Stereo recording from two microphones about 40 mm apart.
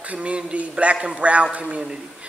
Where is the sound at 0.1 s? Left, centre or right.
Right.